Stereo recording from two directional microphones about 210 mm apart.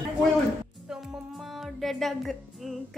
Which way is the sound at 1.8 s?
Centre (ahead or behind).